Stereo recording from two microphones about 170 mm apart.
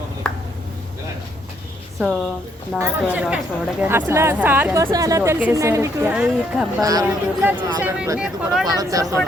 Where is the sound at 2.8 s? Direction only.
10° right (ahead or behind).